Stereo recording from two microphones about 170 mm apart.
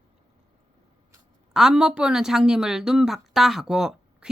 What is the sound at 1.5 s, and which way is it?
A woman's voice, 5° right (ahead or behind).